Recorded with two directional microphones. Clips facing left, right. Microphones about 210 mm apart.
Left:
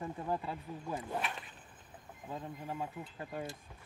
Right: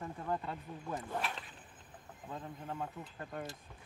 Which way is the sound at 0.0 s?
10° left (ahead or behind).